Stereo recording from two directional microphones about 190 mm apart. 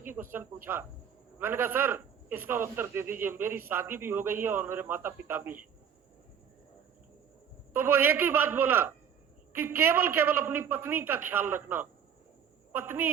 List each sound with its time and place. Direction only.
0.0 s a man's voice: 10° right (ahead or behind)
7.7 s a man's voice: 10° right (ahead or behind)